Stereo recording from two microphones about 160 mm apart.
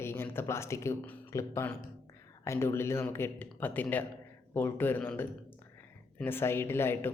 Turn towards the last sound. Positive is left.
turn(degrees=15)  # may be behind; listen again after turning